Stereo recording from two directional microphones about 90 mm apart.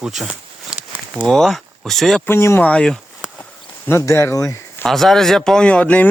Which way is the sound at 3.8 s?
30° left (ahead or behind).